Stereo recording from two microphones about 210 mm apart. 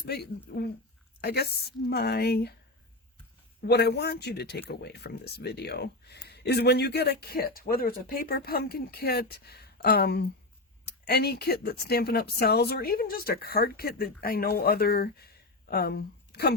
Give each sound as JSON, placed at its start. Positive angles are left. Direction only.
{"t": 0.0, "sound": "speech", "side_deg": 50}
{"t": 3.6, "sound": "speech", "side_deg": 50}